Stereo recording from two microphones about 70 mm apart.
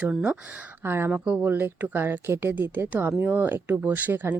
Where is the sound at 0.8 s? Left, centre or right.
Right.